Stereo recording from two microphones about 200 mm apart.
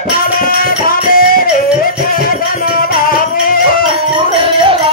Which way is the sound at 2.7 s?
45° left (ahead or behind).